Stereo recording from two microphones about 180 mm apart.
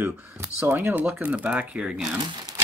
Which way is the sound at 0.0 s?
15° right (ahead or behind).